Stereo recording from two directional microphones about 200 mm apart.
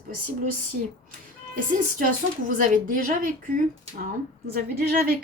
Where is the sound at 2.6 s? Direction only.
40° right (ahead or behind).